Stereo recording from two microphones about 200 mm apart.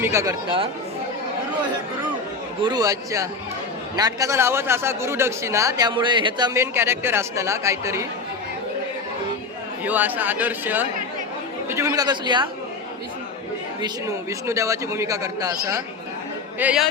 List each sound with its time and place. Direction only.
0.0 s a man's voice: 15° right (ahead or behind)
2.6 s a man's voice: 20° right (ahead or behind)
9.8 s a man's voice: 10° right (ahead or behind)
13.8 s a man's voice: 15° right (ahead or behind)
16.6 s speech: 5° right (ahead or behind)